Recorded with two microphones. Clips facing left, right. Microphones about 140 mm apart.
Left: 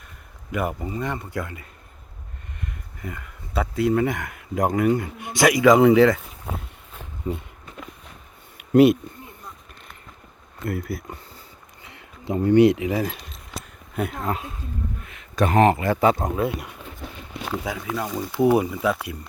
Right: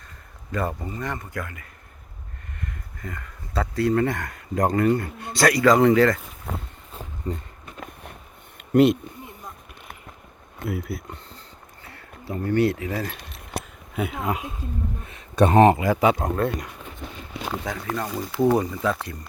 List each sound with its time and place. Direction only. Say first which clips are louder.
0.5 s speech: left 1 dB; 15° left (ahead or behind)
2.6 s a sound: even; 15° left (ahead or behind)
3.9 s speech: even; 5° left (ahead or behind)
8.5 s a sound: left 2 dB; 5° left (ahead or behind)
10.7 s speech: left 1 dB; centre (ahead or behind)
11.8 s a sound: even; 15° left (ahead or behind)
12.3 s speech: left 6 dB; 15° left (ahead or behind)
13.1 s keys jangling: right 4 dB; 60° right (ahead or behind)
13.9 s speech: even; 5° right (ahead or behind)
15.0 s speech: right 4 dB; 25° right (ahead or behind); by 16.2 s 10° right (ahead or behind)
16.2 s speech: even; 5° left (ahead or behind)
17.7 s speech: even; 5° left (ahead or behind)